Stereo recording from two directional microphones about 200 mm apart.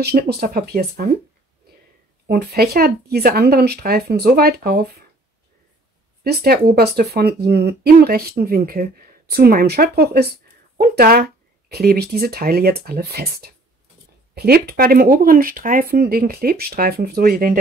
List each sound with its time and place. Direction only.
0.0 s speech: 50° right (ahead or behind)
2.2 s speech: 50° right (ahead or behind)
6.2 s speech: 50° right (ahead or behind)